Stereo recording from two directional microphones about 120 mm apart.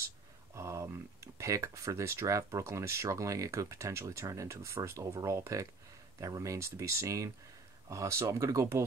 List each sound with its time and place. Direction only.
0.6 s speech: 25° right (ahead or behind)